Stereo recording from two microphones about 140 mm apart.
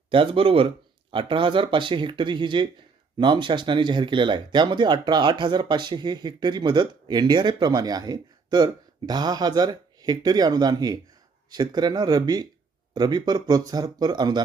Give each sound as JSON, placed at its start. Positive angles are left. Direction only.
{"t": 0.1, "sound": "speech", "side_deg": -40}